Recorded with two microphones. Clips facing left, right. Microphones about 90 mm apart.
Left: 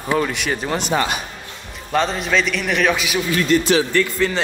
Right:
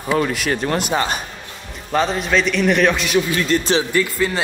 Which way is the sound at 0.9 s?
35° right (ahead or behind).